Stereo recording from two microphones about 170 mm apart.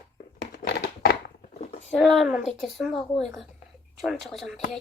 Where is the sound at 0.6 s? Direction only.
75° left (ahead or behind).